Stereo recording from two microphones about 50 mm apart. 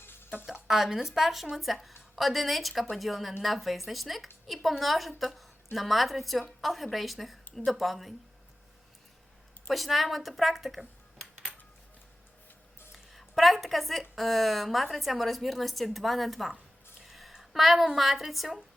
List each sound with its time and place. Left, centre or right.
0.0 s a sound: left
0.7 s a woman's voice: centre
9.6 s speech: centre
12.9 s speech: centre
17.0 s a sound: centre
17.3 s speech: centre